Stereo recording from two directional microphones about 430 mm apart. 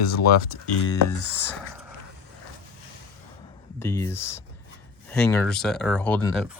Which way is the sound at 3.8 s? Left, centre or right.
Centre.